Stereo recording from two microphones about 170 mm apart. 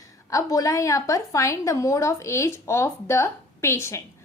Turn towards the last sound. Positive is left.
turn(degrees=15)  # may be behind; listen again after turning